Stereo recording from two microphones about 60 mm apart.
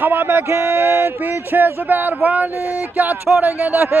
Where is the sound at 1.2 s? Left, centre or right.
Right.